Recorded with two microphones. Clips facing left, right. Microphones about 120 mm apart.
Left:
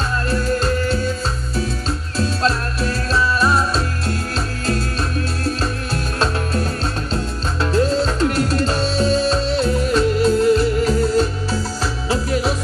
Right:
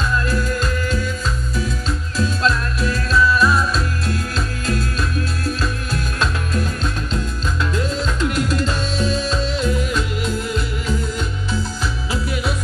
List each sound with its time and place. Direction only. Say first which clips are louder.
0.1 s music: left 1 dB; 35° left (ahead or behind)
5.4 s music: left 1 dB; 35° left (ahead or behind)